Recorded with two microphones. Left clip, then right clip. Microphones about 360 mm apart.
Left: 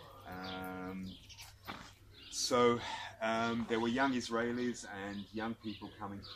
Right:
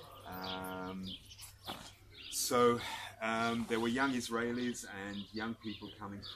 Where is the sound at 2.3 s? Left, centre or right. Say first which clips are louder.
Even; centre.